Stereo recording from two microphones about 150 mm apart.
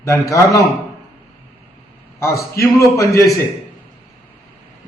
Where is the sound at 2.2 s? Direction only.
20° left (ahead or behind).